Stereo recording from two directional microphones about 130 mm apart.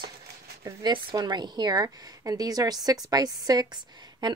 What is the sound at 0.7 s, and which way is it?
Speech, 30° right (ahead or behind).